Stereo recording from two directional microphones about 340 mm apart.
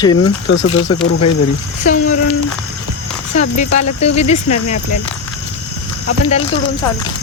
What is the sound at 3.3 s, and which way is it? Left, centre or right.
Speech, centre.